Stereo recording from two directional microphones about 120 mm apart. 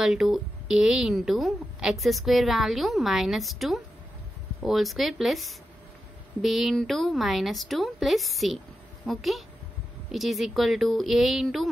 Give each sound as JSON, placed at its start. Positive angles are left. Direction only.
{"t": 0.0, "sound": "a woman's voice", "side_deg": 0}